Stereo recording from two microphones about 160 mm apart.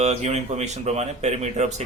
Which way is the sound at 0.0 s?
45° right (ahead or behind).